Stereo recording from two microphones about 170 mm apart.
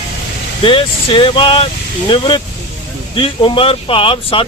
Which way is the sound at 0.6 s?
30° left (ahead or behind).